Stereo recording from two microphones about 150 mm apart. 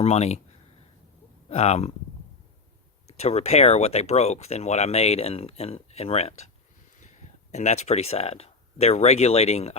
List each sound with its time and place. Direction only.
0.0 s speech: 45° left (ahead or behind)
1.5 s speech: 45° left (ahead or behind)
3.1 s speech: 45° left (ahead or behind)
7.5 s speech: 50° left (ahead or behind)